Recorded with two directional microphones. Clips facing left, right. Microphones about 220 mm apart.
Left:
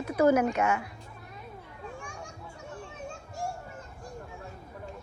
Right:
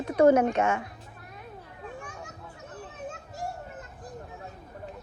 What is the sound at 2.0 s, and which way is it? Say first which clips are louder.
Children playing: even; 5° right (ahead or behind).